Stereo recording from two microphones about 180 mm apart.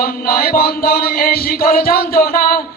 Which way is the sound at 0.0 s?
55° left (ahead or behind).